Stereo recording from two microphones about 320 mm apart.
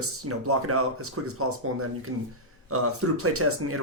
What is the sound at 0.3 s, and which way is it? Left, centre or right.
Speech, right.